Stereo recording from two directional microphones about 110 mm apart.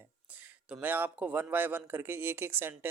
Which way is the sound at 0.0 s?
15° right (ahead or behind).